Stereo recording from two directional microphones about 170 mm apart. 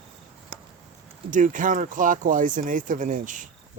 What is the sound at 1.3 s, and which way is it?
Speech, 50° right (ahead or behind).